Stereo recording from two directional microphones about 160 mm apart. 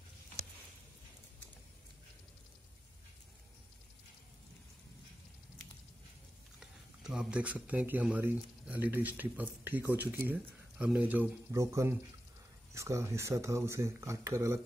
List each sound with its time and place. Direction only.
6.6 s speech: 5° right (ahead or behind)